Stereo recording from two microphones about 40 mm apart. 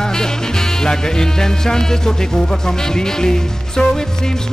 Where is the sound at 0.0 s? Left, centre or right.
Centre.